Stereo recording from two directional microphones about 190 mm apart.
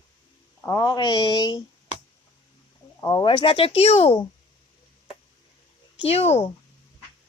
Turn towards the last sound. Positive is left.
turn(degrees=35)  # may be behind; listen again after turning